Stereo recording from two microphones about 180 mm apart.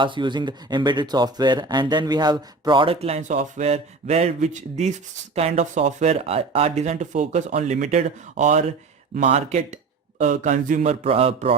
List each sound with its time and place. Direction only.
0.0 s speech: 25° right (ahead or behind)